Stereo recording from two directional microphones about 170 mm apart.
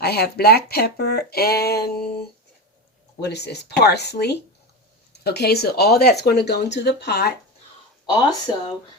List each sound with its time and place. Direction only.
0.0 s speech: 70° left (ahead or behind)
3.2 s speech: 75° left (ahead or behind)
8.0 s speech: 25° left (ahead or behind)